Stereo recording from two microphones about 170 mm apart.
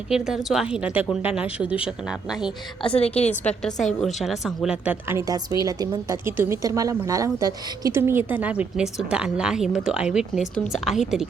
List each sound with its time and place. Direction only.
0.1 s speech: centre (ahead or behind)
2.8 s a woman's voice: 35° left (ahead or behind)
3.2 s speech: 5° left (ahead or behind)